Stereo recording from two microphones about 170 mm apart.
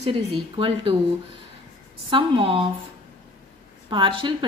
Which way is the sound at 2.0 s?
30° right (ahead or behind).